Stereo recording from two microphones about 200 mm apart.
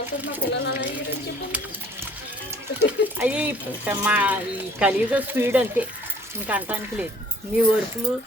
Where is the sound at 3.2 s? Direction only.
5° right (ahead or behind).